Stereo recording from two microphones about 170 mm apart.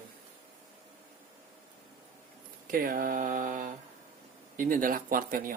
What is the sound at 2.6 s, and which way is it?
Speech, 55° right (ahead or behind).